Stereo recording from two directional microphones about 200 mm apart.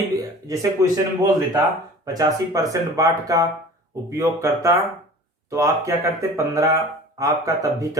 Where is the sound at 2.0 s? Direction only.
15° right (ahead or behind).